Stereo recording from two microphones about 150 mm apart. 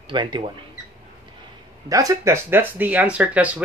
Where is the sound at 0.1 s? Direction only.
30° right (ahead or behind).